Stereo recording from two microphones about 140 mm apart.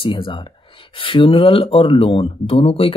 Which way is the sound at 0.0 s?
35° left (ahead or behind).